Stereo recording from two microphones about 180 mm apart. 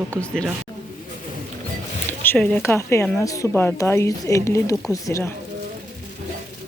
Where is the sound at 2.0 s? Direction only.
10° left (ahead or behind).